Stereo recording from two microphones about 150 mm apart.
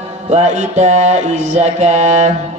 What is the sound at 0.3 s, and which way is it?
Mantra, 50° right (ahead or behind).